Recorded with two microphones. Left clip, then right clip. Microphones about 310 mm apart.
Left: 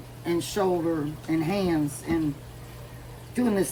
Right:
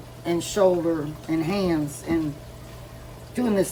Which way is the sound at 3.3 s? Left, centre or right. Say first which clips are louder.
Right 2 dB; centre.